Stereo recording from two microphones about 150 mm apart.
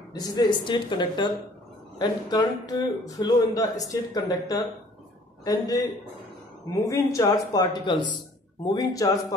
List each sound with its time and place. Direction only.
0.1 s a man's voice: 25° left (ahead or behind)
6.9 s a man's voice: 20° left (ahead or behind)